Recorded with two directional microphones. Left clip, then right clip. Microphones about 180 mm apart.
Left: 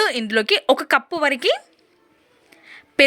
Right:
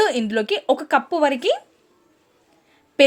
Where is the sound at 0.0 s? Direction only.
20° left (ahead or behind).